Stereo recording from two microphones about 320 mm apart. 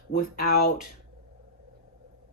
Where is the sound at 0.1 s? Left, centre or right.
Left.